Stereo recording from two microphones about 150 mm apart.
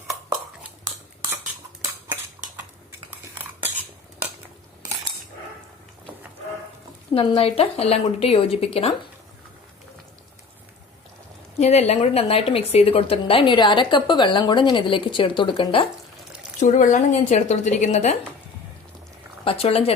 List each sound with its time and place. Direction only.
7.1 s a woman's voice: 40° left (ahead or behind)
11.6 s a woman's voice: 45° left (ahead or behind)
16.6 s speech: 60° left (ahead or behind)
19.5 s a woman's voice: 40° left (ahead or behind)